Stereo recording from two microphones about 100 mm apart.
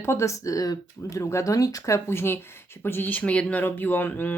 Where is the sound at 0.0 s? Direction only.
30° left (ahead or behind).